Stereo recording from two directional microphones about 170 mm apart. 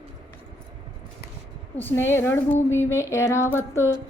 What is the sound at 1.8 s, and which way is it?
Speech, 10° left (ahead or behind).